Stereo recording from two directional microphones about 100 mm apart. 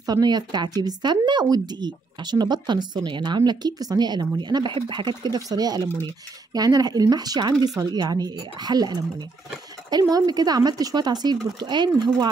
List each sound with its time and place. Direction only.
0.0 s speech: 40° right (ahead or behind)